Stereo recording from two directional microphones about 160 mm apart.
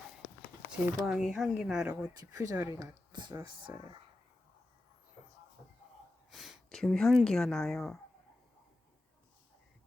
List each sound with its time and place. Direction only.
0.7 s speech: centre (ahead or behind)
2.3 s speech: 20° right (ahead or behind)
6.3 s a sound: centre (ahead or behind)
7.3 s speech: centre (ahead or behind)